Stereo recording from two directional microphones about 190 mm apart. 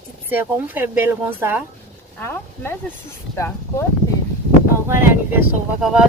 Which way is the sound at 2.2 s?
10° left (ahead or behind).